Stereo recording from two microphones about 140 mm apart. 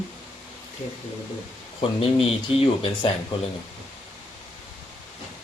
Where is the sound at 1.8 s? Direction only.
40° left (ahead or behind).